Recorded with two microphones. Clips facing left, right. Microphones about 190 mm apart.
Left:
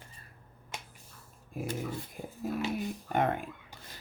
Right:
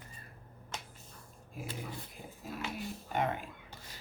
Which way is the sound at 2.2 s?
55° left (ahead or behind).